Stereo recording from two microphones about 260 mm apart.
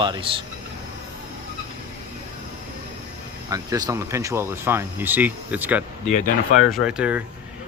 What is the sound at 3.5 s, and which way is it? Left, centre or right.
Speech, centre.